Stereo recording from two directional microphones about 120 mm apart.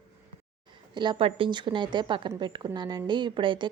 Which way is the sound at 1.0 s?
40° right (ahead or behind).